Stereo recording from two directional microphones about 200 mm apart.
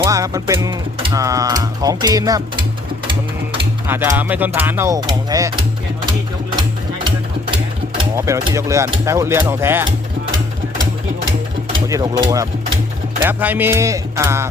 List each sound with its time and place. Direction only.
0.0 s music: 15° right (ahead or behind)
1.1 s speech: 15° right (ahead or behind)
3.8 s speech: 10° right (ahead or behind)
8.1 s speech: 15° right (ahead or behind)
11.9 s speech: 15° right (ahead or behind)